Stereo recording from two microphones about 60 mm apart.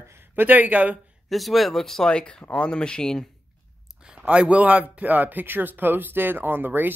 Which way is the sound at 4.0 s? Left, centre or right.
Centre.